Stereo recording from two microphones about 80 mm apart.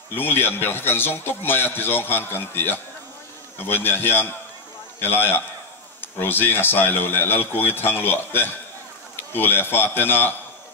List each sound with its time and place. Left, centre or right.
0.1 s a man's voice: left